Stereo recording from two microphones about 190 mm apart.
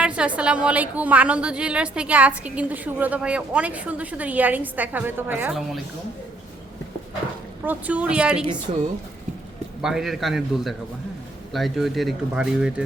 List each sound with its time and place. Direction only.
0.0 s a woman's voice: 5° right (ahead or behind)
7.6 s a woman's voice: 10° right (ahead or behind)
8.7 s speech: 35° right (ahead or behind)
9.8 s speech: centre (ahead or behind)